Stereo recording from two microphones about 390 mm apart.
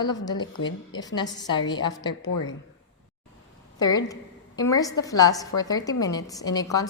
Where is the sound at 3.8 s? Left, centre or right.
Centre.